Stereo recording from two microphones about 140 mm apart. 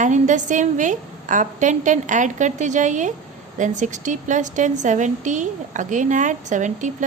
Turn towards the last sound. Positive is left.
turn(degrees=-60)  # may be behind; listen again after turning